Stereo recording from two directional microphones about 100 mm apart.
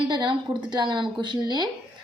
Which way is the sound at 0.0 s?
50° right (ahead or behind).